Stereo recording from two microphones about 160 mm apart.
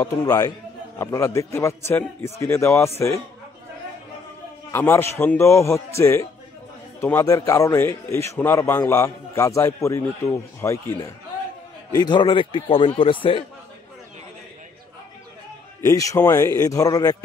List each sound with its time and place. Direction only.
0.0 s a man's voice: 20° left (ahead or behind)
4.7 s a man's voice: 15° left (ahead or behind)
11.9 s a man's voice: 25° left (ahead or behind)
15.8 s a man's voice: 20° left (ahead or behind)